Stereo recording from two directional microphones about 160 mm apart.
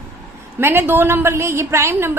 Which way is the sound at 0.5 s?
15° right (ahead or behind).